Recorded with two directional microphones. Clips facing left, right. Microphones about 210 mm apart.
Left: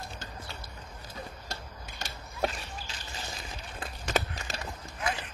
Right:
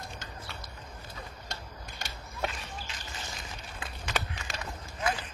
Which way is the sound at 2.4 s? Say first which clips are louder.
Left 4 dB; 35° left (ahead or behind).